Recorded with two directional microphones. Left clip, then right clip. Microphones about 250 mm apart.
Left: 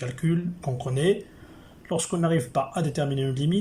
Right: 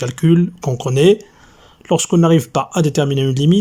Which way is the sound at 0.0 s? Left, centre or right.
Right.